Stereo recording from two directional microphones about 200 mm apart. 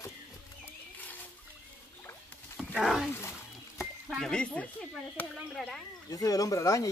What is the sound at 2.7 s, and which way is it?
Speech, centre (ahead or behind).